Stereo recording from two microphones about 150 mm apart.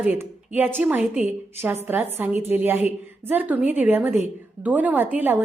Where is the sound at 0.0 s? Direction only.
10° right (ahead or behind).